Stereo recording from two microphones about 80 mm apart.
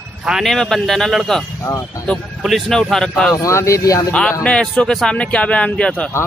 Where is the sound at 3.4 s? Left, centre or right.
Left.